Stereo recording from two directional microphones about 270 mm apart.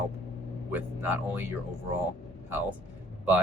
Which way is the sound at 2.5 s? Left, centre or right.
Centre.